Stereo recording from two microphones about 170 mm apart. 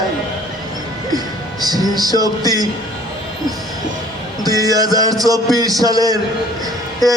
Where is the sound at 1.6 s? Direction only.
20° right (ahead or behind).